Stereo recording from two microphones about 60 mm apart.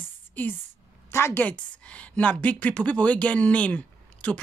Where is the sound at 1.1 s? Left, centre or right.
Left.